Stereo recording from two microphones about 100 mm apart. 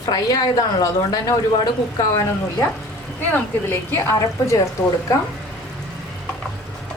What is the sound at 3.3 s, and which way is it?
A woman's voice, 20° left (ahead or behind).